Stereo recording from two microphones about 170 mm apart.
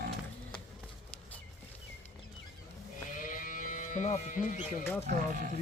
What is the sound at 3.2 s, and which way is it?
Sheep, 55° left (ahead or behind).